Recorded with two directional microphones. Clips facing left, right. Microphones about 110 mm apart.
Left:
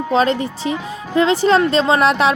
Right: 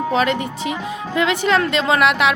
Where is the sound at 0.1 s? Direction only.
30° left (ahead or behind).